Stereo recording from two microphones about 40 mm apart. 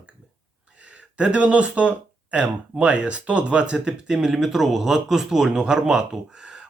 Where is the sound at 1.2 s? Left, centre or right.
Right.